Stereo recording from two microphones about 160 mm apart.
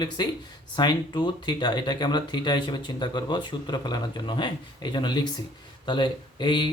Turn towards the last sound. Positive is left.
turn(degrees=30)  # may be behind; listen again after turning